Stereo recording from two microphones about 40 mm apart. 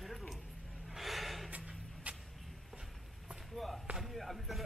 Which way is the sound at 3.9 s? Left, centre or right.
Centre.